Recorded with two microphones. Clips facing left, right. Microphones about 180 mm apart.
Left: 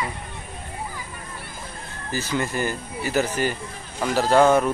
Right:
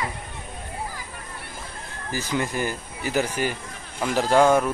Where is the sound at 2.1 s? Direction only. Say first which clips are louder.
Left 1 dB; 15° right (ahead or behind).